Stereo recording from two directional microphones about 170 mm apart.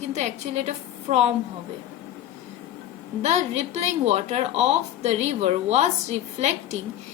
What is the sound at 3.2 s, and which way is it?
Speech, 40° right (ahead or behind).